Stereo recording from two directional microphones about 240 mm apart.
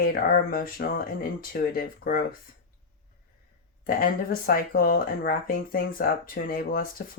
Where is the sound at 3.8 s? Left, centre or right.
Left.